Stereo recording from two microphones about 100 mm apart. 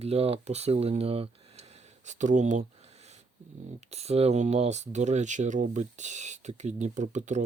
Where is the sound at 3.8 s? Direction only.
90° right.